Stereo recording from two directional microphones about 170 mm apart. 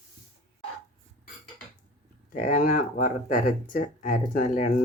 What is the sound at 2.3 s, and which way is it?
Speech, 50° left (ahead or behind).